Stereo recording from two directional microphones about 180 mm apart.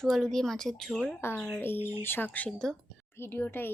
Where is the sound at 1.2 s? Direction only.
10° left (ahead or behind).